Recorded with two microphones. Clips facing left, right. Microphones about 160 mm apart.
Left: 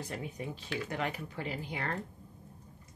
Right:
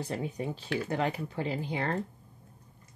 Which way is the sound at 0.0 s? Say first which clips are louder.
Right 6 dB; 30° right (ahead or behind).